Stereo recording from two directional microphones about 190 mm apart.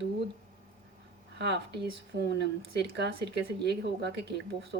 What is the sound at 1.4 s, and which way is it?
Speech, 65° right (ahead or behind).